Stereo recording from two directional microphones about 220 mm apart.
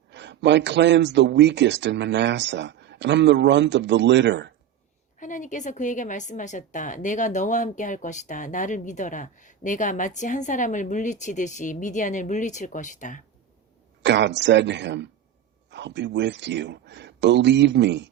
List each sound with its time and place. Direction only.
0.1 s speech: 55° right (ahead or behind)
5.2 s a woman's voice: 35° left (ahead or behind)
14.0 s speech: 55° right (ahead or behind)